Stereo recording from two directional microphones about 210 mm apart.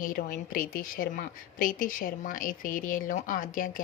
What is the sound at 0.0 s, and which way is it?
A woman's voice, 40° left (ahead or behind).